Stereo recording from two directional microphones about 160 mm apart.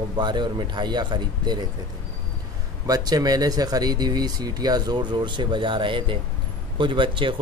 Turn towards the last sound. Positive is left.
turn(degrees=-30)  # may be behind; listen again after turning